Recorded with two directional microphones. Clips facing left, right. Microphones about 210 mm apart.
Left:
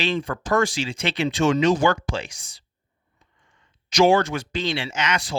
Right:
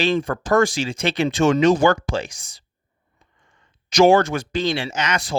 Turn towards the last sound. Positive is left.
turn(degrees=-45)  # may be behind; listen again after turning